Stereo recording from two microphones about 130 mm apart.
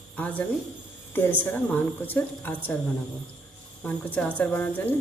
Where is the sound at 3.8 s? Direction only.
10° left (ahead or behind).